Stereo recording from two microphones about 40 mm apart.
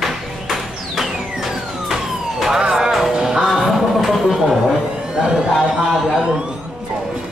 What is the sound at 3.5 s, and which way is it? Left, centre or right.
Speech, centre.